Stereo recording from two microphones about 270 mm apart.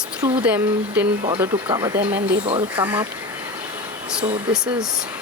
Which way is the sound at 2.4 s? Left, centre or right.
Centre.